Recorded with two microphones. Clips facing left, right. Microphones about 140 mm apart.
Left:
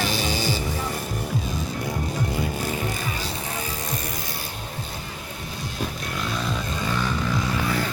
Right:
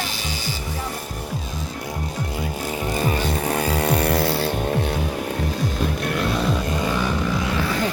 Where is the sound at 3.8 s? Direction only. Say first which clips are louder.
Right 12 dB; 70° right (ahead or behind).